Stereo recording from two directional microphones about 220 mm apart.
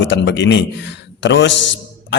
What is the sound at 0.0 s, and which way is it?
A man's voice, 55° left (ahead or behind).